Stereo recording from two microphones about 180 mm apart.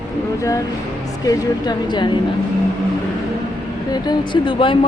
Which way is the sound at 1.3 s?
25° left (ahead or behind).